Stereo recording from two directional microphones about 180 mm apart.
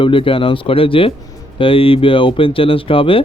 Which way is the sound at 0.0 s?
30° left (ahead or behind).